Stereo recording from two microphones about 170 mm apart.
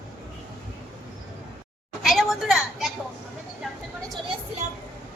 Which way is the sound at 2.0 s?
Centre (ahead or behind).